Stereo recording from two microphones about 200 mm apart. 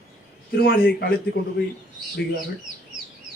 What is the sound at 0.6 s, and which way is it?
Speech, 50° left (ahead or behind).